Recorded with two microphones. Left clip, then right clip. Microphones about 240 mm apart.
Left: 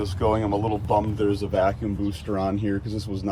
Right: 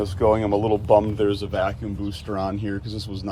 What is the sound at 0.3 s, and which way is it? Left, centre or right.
Speech, right.